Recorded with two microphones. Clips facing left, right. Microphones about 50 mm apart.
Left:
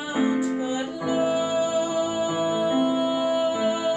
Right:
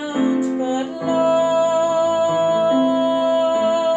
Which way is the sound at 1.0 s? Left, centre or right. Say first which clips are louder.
Right 7 dB; right.